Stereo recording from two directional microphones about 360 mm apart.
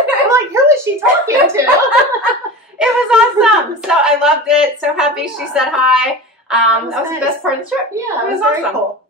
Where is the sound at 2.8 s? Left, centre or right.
Centre.